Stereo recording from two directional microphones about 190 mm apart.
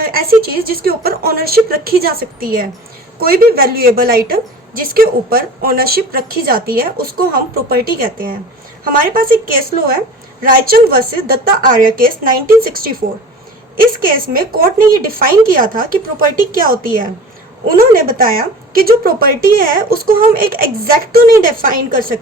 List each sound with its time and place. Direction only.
0.0 s a sound: 50° right (ahead or behind)
0.4 s a woman's voice: 50° right (ahead or behind)
14.3 s a woman's voice: 50° right (ahead or behind)